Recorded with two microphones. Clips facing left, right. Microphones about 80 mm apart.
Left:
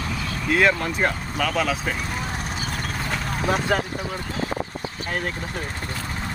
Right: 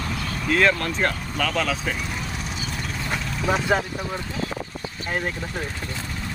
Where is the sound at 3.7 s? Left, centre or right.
Centre.